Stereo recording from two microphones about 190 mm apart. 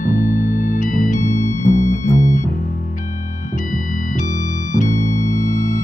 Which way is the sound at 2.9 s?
40° left (ahead or behind).